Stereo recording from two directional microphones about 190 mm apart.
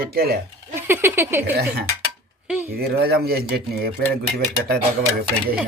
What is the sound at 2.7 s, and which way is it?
Speech, 55° right (ahead or behind).